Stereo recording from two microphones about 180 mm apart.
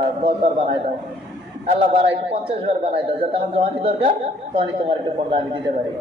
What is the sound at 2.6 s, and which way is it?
A man's voice, 30° right (ahead or behind).